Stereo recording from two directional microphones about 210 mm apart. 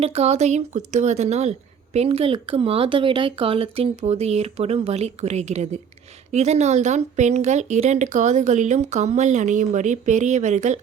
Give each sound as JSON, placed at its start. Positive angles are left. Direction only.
{"t": 0.0, "sound": "speech", "side_deg": -30}